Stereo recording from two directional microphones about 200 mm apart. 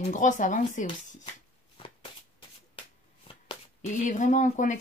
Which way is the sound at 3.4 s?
35° left (ahead or behind).